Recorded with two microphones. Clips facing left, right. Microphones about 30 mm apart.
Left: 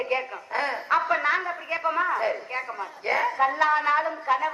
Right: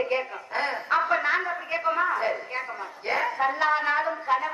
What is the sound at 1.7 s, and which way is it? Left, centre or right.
Speech, centre.